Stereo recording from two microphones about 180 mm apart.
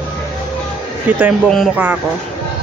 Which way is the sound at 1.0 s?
10° right (ahead or behind).